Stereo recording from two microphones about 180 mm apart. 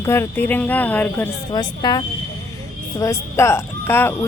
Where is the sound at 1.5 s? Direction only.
25° left (ahead or behind).